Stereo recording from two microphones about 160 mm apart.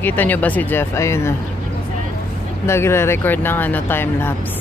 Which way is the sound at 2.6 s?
15° left (ahead or behind).